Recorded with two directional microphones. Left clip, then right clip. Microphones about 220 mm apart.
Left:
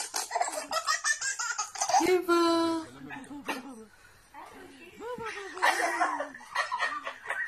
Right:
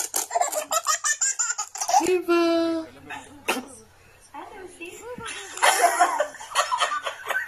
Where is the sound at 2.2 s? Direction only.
10° left (ahead or behind).